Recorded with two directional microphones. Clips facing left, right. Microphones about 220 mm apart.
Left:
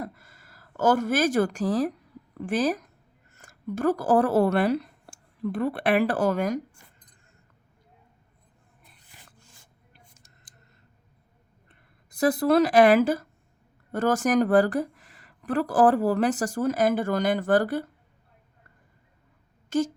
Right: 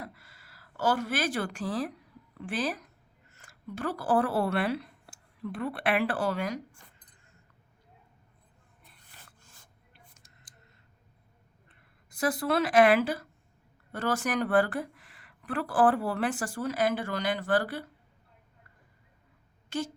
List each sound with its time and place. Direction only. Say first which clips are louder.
0.0 s a sound: left 7 dB; 45° left (ahead or behind)
2.4 s speech: left 7 dB; 45° left (ahead or behind)
12.1 s a woman's voice: left 7 dB; 40° left (ahead or behind)